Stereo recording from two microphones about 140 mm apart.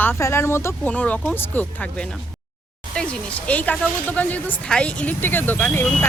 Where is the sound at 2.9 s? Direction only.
10° left (ahead or behind).